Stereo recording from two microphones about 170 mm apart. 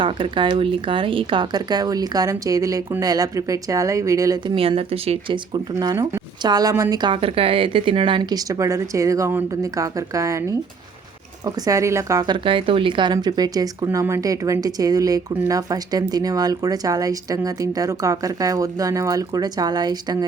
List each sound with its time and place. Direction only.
0.0 s a woman's voice: 30° right (ahead or behind)
4.5 s speech: 35° right (ahead or behind)
5.8 s a woman's voice: 20° right (ahead or behind)